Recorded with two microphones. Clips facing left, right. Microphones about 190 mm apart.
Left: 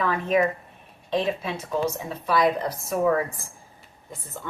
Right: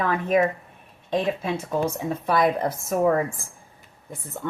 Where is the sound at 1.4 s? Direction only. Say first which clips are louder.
Right 2 dB; 55° right (ahead or behind).